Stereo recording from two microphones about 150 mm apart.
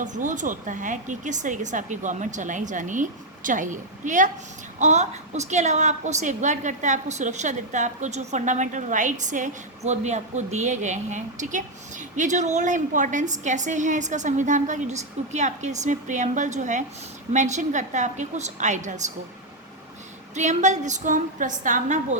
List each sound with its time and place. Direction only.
0.0 s a woman's voice: 60° right (ahead or behind)
20.3 s a woman's voice: 50° right (ahead or behind)